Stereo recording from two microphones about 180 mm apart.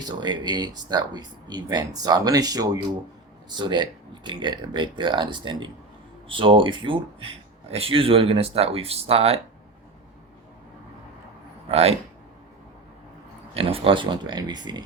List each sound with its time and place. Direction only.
0.0 s speech: 25° right (ahead or behind)
11.7 s speech: 35° right (ahead or behind)
13.5 s speech: 30° right (ahead or behind)